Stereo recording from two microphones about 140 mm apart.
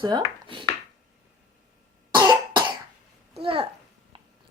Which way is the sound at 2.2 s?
30° right (ahead or behind).